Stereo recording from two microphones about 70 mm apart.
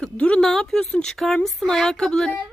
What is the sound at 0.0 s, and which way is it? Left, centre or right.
Speech, centre.